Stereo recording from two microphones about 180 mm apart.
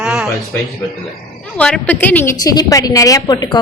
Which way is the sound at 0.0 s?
5° right (ahead or behind).